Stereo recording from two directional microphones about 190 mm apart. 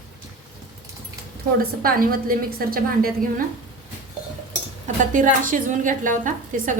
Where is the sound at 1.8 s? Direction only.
50° right (ahead or behind).